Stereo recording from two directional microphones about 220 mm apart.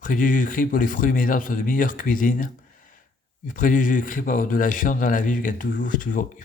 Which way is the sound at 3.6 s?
35° left (ahead or behind).